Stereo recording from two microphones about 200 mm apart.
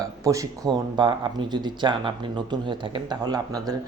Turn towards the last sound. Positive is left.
turn(degrees=-20)  # may be behind; listen again after turning